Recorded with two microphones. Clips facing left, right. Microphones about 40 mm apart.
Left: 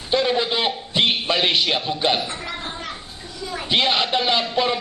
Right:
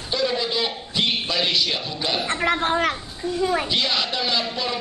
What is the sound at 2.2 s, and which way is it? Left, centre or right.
A child's voice, right.